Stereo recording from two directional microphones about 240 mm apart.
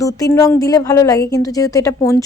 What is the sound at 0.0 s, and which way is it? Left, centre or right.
A woman's voice, centre.